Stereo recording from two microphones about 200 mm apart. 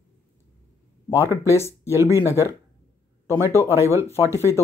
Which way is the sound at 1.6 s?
15° left (ahead or behind).